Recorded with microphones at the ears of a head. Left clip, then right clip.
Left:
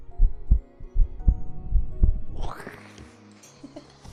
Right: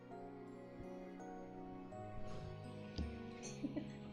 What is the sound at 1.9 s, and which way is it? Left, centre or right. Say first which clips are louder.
Music: left 14 dB; left.